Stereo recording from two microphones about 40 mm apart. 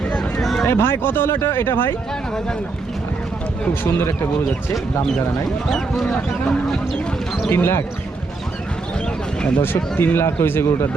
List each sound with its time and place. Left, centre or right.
0.7 s speech: left
3.8 s speech: left
5.6 s speech: centre
6.1 s speech: centre
7.5 s speech: left
9.6 s speech: left